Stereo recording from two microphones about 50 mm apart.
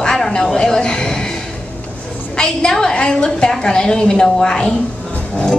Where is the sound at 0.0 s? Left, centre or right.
Centre.